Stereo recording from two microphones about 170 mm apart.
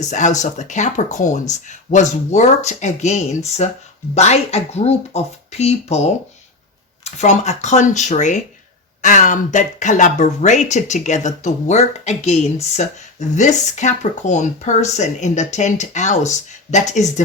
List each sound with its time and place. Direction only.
0.0 s speech: 45° left (ahead or behind)